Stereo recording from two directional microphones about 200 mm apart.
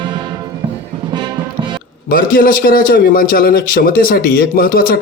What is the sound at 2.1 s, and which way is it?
Speech, 45° left (ahead or behind).